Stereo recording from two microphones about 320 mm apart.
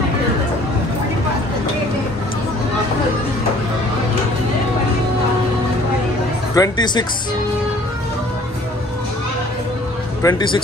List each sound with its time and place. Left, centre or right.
6.5 s speech: centre
10.2 s speech: centre